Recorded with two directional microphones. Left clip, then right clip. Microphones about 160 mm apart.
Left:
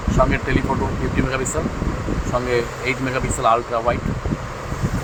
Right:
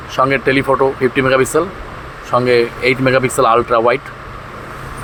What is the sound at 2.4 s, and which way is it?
Speech, 45° right (ahead or behind).